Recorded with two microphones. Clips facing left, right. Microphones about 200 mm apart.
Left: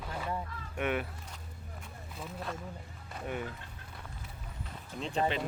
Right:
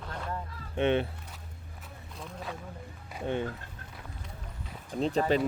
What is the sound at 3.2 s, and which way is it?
Speech, 30° right (ahead or behind).